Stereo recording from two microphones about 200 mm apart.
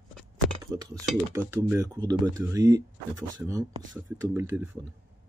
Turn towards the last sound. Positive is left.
turn(degrees=-10)  # may be behind; listen again after turning